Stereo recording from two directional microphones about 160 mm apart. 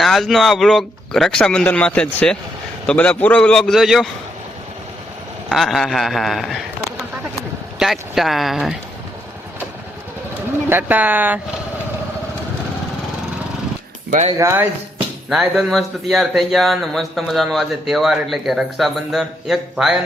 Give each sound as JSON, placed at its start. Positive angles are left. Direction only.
{"t": 0.0, "sound": "a man's voice", "side_deg": 0}
{"t": 5.5, "sound": "a man's voice", "side_deg": 0}
{"t": 7.8, "sound": "a man's voice", "side_deg": 0}
{"t": 10.7, "sound": "speech", "side_deg": -10}
{"t": 14.3, "sound": "speech", "side_deg": -15}
{"t": 15.3, "sound": "a man's voice", "side_deg": 0}